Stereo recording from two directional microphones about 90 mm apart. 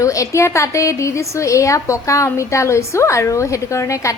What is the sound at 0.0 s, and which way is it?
Speech, 35° left (ahead or behind).